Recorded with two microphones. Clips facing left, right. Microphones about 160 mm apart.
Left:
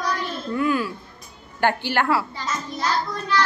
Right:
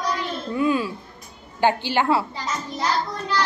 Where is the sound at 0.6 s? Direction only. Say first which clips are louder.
Right 1 dB; 20° right (ahead or behind).